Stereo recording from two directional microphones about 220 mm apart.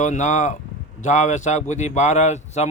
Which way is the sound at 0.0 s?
35° left (ahead or behind).